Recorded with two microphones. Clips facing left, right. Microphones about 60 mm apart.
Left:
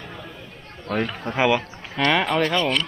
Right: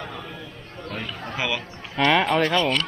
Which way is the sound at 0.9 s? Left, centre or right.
Left.